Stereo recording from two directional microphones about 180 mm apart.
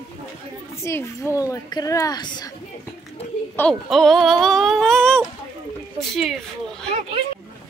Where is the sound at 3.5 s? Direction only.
5° left (ahead or behind).